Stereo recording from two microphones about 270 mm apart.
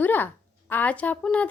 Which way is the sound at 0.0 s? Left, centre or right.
Centre.